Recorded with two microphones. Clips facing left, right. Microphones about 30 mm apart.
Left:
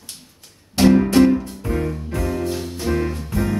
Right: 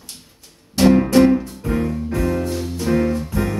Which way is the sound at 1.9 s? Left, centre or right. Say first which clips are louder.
Right 4 dB; centre.